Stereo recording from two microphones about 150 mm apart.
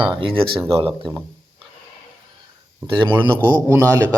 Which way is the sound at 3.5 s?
25° right (ahead or behind).